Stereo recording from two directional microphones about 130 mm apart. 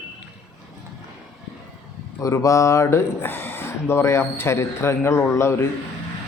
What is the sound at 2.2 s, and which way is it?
Speech, 25° left (ahead or behind).